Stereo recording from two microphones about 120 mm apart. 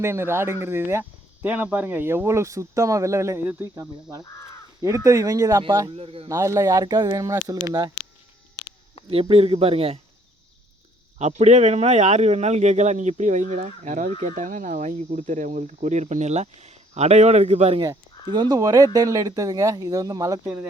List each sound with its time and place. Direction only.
0.0 s speech: 20° right (ahead or behind)
6.0 s speech: 50° right (ahead or behind)
6.2 s speech: 25° right (ahead or behind)
9.0 s speech: 50° right (ahead or behind)
11.2 s speech: 70° right (ahead or behind)
17.7 s speech: 35° right (ahead or behind)